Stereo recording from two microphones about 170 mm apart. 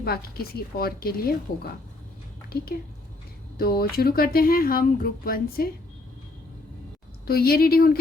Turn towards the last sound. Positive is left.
turn(degrees=60)  # may be behind; listen again after turning